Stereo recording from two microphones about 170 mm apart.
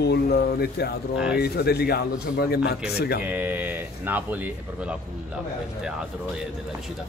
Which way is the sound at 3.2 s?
10° right (ahead or behind).